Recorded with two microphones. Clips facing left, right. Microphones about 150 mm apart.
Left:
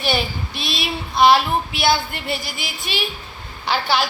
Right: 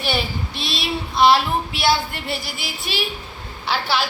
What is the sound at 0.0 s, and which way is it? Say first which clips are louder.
Child singing: left 1 dB; centre (ahead or behind).